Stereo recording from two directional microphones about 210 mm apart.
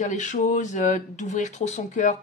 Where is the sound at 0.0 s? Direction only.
35° left (ahead or behind).